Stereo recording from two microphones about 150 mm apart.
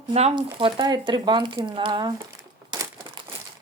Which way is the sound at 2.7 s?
25° right (ahead or behind).